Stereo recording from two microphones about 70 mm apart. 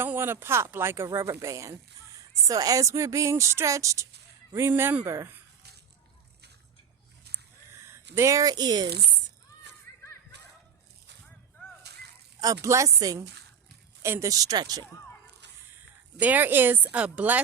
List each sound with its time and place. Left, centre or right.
0.0 s a woman's voice: right
4.7 s speech: right
7.9 s speech: right
12.6 s a woman's voice: right
14.0 s speech: right
16.2 s speech: right